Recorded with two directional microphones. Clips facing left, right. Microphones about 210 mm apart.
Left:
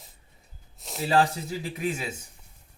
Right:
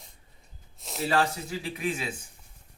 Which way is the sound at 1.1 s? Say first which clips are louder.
Left 4 dB; 40° left (ahead or behind).